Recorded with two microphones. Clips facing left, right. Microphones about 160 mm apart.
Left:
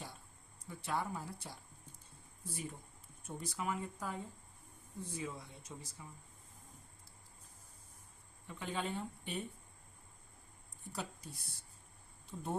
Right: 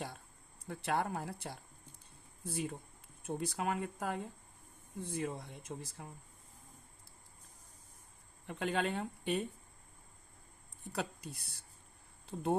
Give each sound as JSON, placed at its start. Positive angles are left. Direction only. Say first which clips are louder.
{"t": 0.7, "sound": "speech", "louder": "right 4 dB", "side_deg": -65}
{"t": 5.1, "sound": "speech", "louder": "right 6 dB", "side_deg": -55}
{"t": 8.4, "sound": "speech", "louder": "right 6 dB", "side_deg": -70}
{"t": 10.9, "sound": "speech", "louder": "right 5 dB", "side_deg": -65}